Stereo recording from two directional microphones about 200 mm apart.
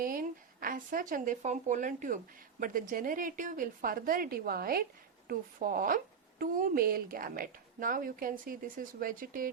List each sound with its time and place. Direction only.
0.0 s speech: 45° right (ahead or behind)